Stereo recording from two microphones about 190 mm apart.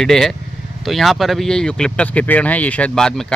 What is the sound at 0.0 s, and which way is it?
Speech, centre (ahead or behind).